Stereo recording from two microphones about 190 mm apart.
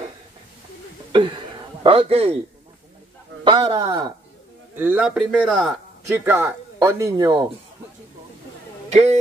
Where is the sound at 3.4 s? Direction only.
25° right (ahead or behind).